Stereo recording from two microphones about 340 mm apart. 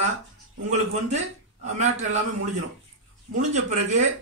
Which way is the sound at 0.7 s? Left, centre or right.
Centre.